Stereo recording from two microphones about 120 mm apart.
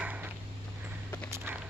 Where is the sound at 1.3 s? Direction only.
25° right (ahead or behind).